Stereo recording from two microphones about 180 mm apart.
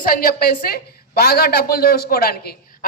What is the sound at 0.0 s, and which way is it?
A woman's voice, 55° left (ahead or behind).